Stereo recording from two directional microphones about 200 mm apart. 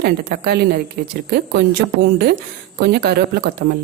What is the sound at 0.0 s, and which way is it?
A woman's voice, 50° right (ahead or behind).